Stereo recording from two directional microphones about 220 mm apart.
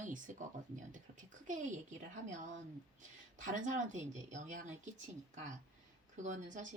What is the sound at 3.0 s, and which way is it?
Speech, 35° right (ahead or behind).